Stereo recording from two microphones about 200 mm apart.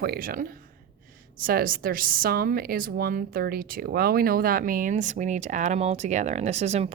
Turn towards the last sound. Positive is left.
turn(degrees=-35)  # may be behind; listen again after turning